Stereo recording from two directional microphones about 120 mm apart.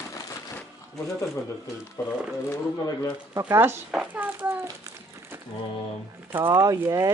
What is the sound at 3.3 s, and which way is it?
Speech, 30° right (ahead or behind).